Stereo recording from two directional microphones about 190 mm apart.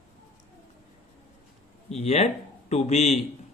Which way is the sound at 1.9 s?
35° left (ahead or behind).